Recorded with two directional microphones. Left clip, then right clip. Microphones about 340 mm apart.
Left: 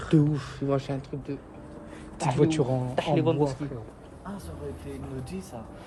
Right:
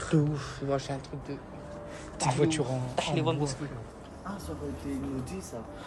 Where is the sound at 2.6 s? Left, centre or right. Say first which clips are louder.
Left 4 dB; left.